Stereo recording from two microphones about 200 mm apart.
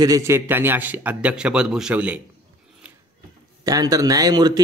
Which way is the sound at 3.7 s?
15° right (ahead or behind).